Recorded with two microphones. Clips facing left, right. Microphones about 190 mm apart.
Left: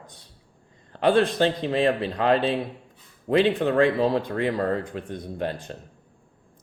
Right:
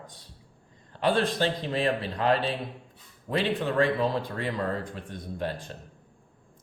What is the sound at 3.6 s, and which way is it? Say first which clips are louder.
Speech: left 5 dB; 50° left (ahead or behind).